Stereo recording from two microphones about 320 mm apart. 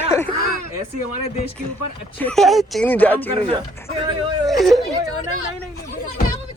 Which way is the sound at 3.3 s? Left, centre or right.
Centre.